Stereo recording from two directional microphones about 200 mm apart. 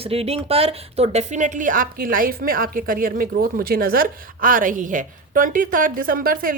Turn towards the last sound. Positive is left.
turn(degrees=-45)  # may be behind; listen again after turning